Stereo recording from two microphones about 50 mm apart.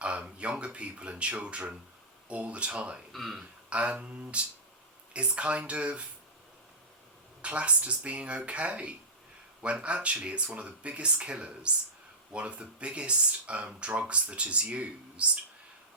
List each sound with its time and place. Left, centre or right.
0.3 s speech: right
3.1 s speech: centre
3.7 s speech: right
7.4 s speech: right